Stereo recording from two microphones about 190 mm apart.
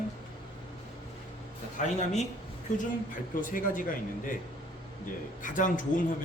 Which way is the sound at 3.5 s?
45° left (ahead or behind).